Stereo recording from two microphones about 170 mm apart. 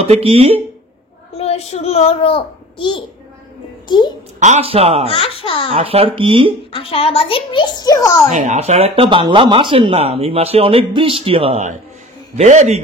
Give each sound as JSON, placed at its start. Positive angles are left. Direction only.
{"t": 0.0, "sound": "speech", "side_deg": -35}
{"t": 1.3, "sound": "a child's voice", "side_deg": 35}
{"t": 4.4, "sound": "speech", "side_deg": -40}
{"t": 5.0, "sound": "speech", "side_deg": 35}
{"t": 5.7, "sound": "speech", "side_deg": -35}
{"t": 6.7, "sound": "a child's voice", "side_deg": 35}
{"t": 8.3, "sound": "speech", "side_deg": -40}